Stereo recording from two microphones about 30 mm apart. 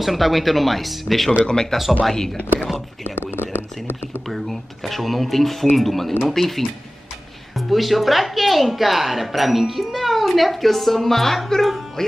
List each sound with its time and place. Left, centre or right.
0.0 s speech: centre
1.4 s speech: left
4.3 s speech: centre